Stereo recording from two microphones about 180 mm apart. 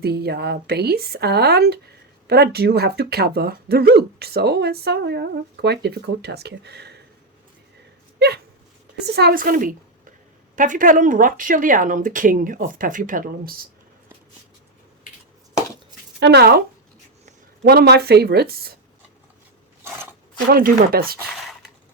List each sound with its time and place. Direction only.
0.0 s speech: 60° right (ahead or behind)
9.0 s speech: 65° right (ahead or behind)
16.2 s speech: 65° right (ahead or behind)
20.5 s speech: 55° right (ahead or behind)